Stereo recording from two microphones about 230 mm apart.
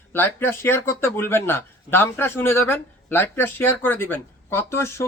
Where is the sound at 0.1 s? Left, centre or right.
Centre.